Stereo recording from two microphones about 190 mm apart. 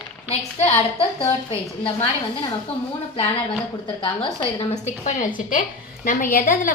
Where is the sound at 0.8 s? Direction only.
30° left (ahead or behind).